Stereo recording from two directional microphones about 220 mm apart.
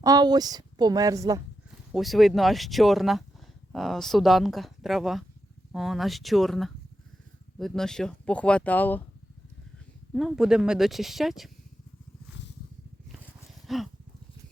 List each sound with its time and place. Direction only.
0.0 s a woman's voice: 15° right (ahead or behind)
1.9 s speech: centre (ahead or behind)
10.2 s speech: centre (ahead or behind)
13.7 s dog: centre (ahead or behind)